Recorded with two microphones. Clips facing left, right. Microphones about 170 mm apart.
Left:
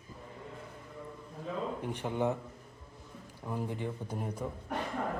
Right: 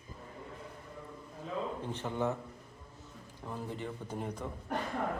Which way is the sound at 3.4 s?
15° left (ahead or behind).